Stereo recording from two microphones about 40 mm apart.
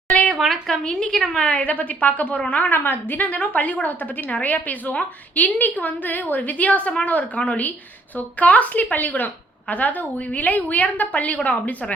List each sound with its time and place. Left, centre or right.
0.3 s speech: centre
0.7 s a woman's voice: centre
1.5 s a woman's voice: left
2.8 s a woman's voice: left
3.2 s a woman's voice: left
8.8 s a woman's voice: left